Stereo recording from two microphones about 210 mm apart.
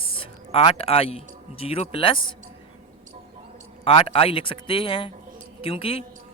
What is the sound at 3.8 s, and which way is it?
Speech, 25° left (ahead or behind).